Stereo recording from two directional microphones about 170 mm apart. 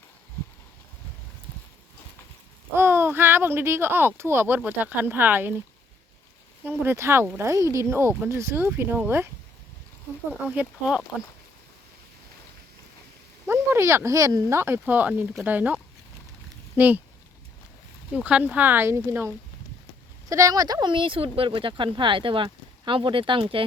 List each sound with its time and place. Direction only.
2.7 s speech: 15° right (ahead or behind)
6.7 s speech: 15° right (ahead or behind)
10.4 s speech: 10° right (ahead or behind)
13.5 s speech: 15° right (ahead or behind)
18.1 s speech: 5° right (ahead or behind)
20.3 s speech: 20° right (ahead or behind)